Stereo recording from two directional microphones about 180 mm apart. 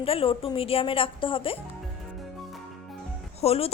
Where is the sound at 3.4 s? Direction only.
35° left (ahead or behind).